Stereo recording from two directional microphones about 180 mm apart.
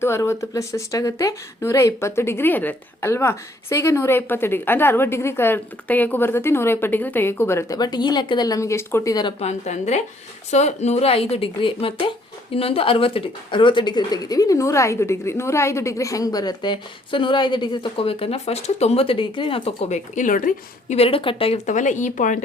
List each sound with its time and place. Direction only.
0.0 s speech: 15° left (ahead or behind)
9.4 s speech: 40° left (ahead or behind)
20.9 s speech: 30° left (ahead or behind)